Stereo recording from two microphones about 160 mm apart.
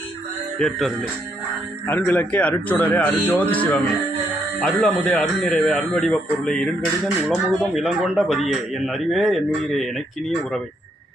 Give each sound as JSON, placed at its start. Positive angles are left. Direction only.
{"t": 0.6, "sound": "a man's voice", "side_deg": 0}